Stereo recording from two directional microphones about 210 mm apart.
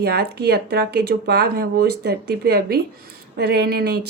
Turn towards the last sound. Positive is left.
turn(degrees=-45)  # may be behind; listen again after turning